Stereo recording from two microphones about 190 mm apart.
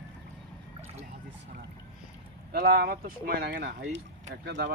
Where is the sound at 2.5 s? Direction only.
55° right (ahead or behind).